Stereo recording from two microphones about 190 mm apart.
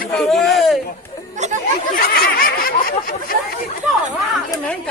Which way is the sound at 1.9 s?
50° left (ahead or behind).